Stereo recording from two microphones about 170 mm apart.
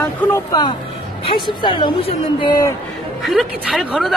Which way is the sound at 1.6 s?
30° left (ahead or behind).